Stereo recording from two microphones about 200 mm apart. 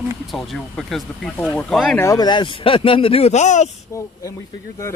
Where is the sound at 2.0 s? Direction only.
20° left (ahead or behind); by 3.7 s 35° left (ahead or behind).